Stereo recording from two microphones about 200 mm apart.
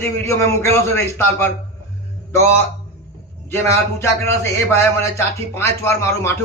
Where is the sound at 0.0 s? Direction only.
15° left (ahead or behind).